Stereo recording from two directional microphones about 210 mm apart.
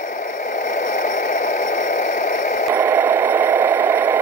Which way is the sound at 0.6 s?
35° left (ahead or behind).